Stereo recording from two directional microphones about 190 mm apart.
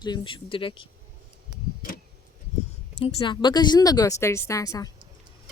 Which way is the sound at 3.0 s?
25° left (ahead or behind).